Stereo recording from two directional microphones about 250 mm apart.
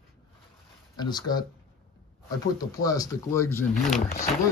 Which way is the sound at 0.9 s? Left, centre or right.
Centre.